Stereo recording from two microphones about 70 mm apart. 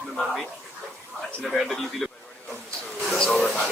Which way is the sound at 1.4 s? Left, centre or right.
Centre.